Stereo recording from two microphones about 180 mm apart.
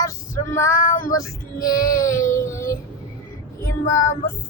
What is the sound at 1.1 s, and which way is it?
Female singing, 20° left (ahead or behind).